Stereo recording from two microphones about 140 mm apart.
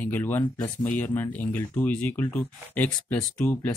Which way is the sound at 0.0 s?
15° left (ahead or behind).